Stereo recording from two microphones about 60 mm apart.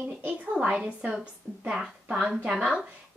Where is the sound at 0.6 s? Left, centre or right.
Centre.